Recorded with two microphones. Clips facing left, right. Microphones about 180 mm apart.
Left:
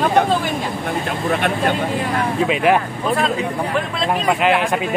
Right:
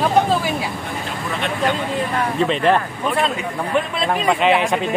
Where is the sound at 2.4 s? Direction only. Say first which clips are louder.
Left 1 dB; 10° left (ahead or behind).